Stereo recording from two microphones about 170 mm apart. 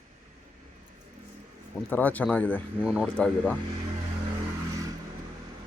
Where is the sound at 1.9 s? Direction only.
10° left (ahead or behind).